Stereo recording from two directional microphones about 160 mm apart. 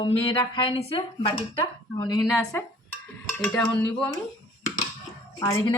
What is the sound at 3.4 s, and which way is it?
Speech, 10° left (ahead or behind).